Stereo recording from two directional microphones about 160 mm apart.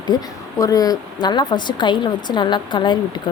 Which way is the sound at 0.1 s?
25° left (ahead or behind).